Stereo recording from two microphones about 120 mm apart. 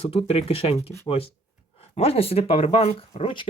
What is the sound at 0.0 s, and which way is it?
Speech, 55° left (ahead or behind).